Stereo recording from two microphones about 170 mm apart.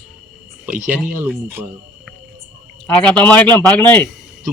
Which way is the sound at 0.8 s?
10° right (ahead or behind).